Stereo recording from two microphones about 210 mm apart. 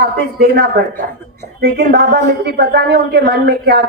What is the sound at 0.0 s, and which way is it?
Speech, 45° right (ahead or behind).